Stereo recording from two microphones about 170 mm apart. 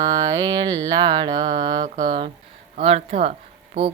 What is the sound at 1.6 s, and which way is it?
Mantra, 25° right (ahead or behind).